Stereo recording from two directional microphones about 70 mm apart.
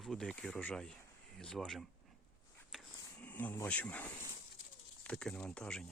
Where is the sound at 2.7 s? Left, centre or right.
Centre.